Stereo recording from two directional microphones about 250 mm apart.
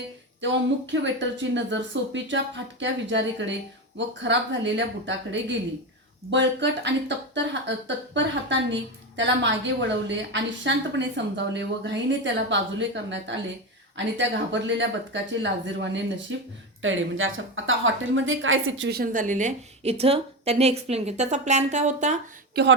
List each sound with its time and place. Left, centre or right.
0.4 s a woman's voice: right
22.5 s speech: right